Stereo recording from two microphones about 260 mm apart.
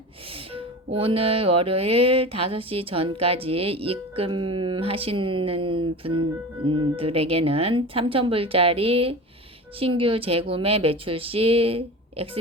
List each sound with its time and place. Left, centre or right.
0.9 s speech: right